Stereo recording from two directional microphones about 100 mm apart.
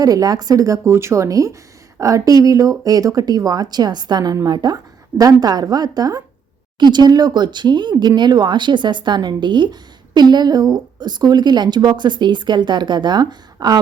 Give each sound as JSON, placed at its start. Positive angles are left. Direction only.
{"t": 0.0, "sound": "speech", "side_deg": -40}